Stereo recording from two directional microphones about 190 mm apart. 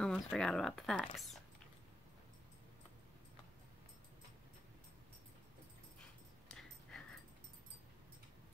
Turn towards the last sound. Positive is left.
turn(degrees=5)  # may be behind; listen again after turning